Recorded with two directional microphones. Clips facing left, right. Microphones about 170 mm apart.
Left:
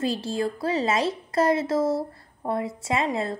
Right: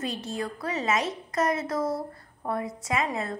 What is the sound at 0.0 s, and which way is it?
A woman's voice, 30° left (ahead or behind).